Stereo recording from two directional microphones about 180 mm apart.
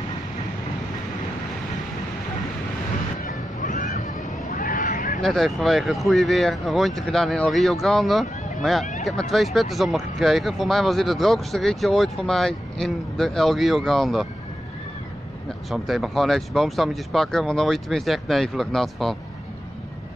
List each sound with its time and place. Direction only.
3.3 s music: 45° left (ahead or behind)
4.5 s a sound: 50° left (ahead or behind)
5.2 s speech: centre (ahead or behind)
15.7 s speech: centre (ahead or behind)